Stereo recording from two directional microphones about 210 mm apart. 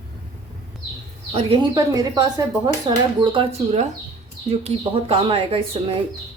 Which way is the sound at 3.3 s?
30° right (ahead or behind).